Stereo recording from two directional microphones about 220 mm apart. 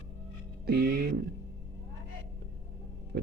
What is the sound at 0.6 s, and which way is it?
Music, 45° right (ahead or behind).